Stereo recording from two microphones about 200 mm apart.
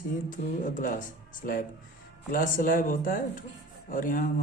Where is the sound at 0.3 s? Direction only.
40° left (ahead or behind).